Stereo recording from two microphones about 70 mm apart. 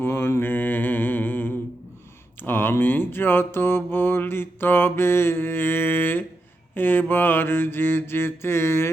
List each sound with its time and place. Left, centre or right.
0.0 s mantra: left